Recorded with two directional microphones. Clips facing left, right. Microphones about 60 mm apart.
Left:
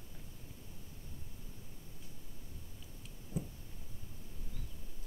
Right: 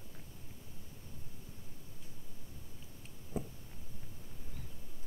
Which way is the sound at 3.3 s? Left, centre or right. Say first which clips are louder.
Right 2 dB; right.